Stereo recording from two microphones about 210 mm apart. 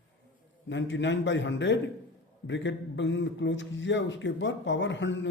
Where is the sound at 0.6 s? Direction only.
60° left (ahead or behind).